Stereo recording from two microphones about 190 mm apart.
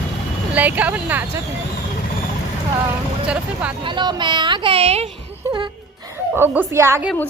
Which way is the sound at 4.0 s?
25° right (ahead or behind).